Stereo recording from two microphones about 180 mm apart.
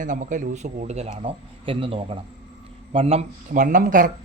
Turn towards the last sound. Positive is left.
turn(degrees=-45)  # may be behind; listen again after turning